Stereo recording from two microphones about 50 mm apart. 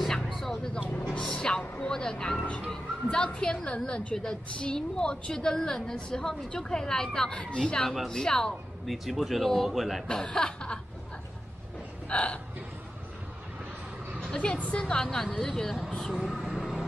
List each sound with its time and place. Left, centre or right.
0.0 s a sound: centre
1.0 s a woman's voice: centre
8.8 s speech: centre
10.0 s a woman's voice: centre
12.1 s speech: left
14.3 s a woman's voice: centre